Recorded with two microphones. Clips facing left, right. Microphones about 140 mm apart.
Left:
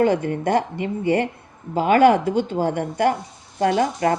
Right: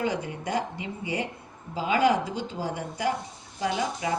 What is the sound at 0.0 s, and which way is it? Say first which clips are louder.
A woman's voice: left 10 dB; 55° left (ahead or behind).